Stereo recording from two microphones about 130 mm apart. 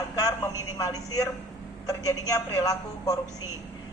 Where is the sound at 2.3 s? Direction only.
25° left (ahead or behind).